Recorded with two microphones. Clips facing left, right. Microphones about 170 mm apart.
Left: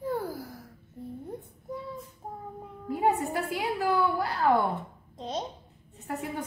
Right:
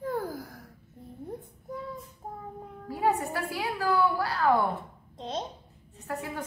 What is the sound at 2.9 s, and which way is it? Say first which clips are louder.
A woman's voice: left 1 dB; 20° left (ahead or behind).